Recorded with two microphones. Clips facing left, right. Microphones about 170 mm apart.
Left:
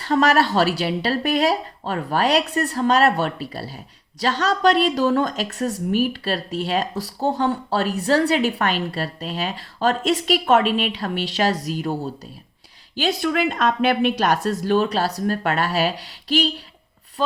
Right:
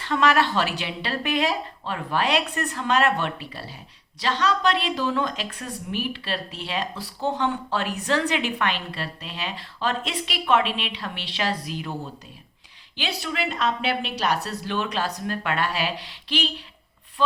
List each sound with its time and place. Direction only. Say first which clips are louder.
0.0 s speech: left 3 dB; 40° left (ahead or behind)
13.0 s speech: left 8 dB; 50° left (ahead or behind)
14.6 s speech: left 7 dB; 40° left (ahead or behind)